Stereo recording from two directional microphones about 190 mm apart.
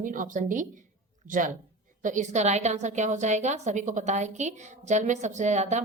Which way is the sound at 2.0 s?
40° right (ahead or behind).